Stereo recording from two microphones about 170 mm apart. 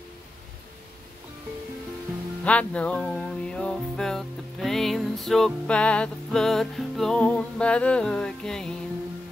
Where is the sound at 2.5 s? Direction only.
5° left (ahead or behind).